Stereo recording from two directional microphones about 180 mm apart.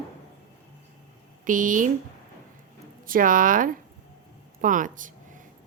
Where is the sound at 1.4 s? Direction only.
45° right (ahead or behind).